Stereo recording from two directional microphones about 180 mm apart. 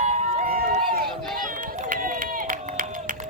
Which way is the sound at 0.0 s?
45° right (ahead or behind).